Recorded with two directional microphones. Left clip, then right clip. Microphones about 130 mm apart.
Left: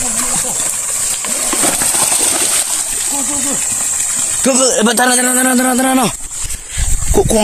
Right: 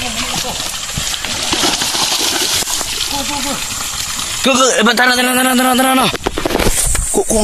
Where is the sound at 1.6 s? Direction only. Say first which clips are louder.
Right 1 dB; 35° left (ahead or behind).